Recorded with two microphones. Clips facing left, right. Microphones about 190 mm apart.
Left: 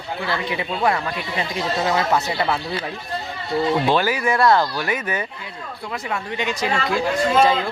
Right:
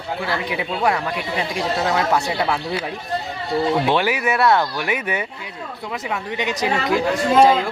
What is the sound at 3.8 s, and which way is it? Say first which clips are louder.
Speech: even; 10° right (ahead or behind).